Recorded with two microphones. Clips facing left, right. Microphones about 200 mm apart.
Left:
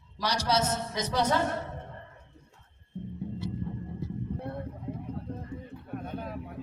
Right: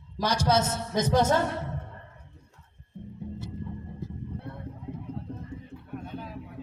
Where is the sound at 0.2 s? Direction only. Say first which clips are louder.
Right 3 dB; 50° right (ahead or behind).